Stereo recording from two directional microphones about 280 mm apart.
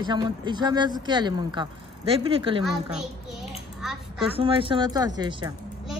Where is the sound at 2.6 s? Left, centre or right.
Centre.